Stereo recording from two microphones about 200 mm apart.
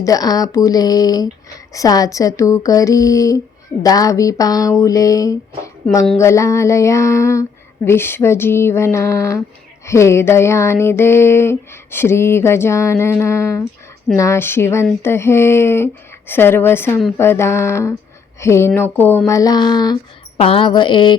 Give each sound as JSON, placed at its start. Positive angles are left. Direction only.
{"t": 0.0, "sound": "speech", "side_deg": 20}
{"t": 1.7, "sound": "a sound", "side_deg": 15}
{"t": 18.3, "sound": "speech", "side_deg": 15}